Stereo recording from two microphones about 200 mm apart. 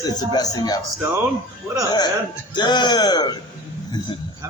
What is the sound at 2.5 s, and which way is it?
Speech, 20° left (ahead or behind).